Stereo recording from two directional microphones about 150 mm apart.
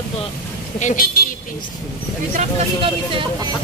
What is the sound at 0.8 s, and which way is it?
Speech, 55° left (ahead or behind).